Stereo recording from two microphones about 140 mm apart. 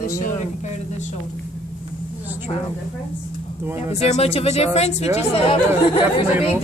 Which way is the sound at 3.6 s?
15° right (ahead or behind).